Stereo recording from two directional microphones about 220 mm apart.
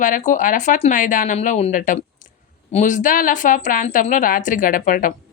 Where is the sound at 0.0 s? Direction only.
35° left (ahead or behind).